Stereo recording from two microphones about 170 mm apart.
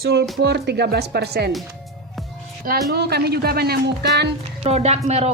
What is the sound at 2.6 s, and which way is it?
Speech, 60° right (ahead or behind).